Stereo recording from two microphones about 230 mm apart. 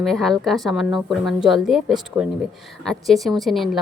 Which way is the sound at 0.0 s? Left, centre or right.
Centre.